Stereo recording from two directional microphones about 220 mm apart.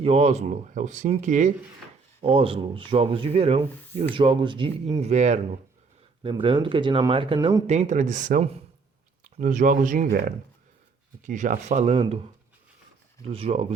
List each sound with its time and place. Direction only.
0.0 s speech: 30° right (ahead or behind)
7.7 s speech: 30° right (ahead or behind)
13.3 s speech: 25° right (ahead or behind)